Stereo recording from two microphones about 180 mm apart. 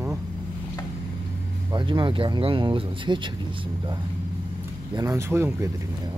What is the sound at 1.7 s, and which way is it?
Speech, 25° right (ahead or behind).